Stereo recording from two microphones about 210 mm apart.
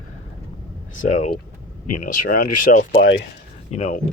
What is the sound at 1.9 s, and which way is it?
Speech, 40° left (ahead or behind).